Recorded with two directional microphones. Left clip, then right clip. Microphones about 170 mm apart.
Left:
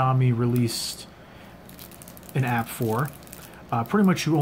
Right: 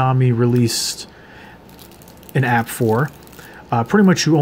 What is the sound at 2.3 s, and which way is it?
Speech, 30° right (ahead or behind).